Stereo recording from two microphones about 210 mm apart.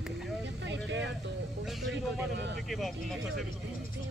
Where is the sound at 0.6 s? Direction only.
60° right (ahead or behind).